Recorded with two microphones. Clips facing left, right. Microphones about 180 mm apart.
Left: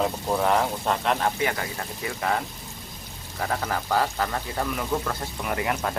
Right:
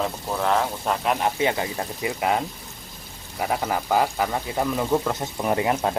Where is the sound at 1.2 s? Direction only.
20° right (ahead or behind).